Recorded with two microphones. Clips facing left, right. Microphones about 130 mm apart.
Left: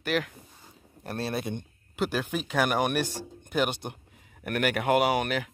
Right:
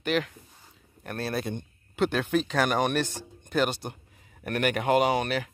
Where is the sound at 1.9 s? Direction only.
5° left (ahead or behind).